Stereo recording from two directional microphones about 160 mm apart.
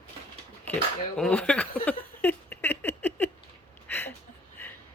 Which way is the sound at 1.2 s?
5° left (ahead or behind).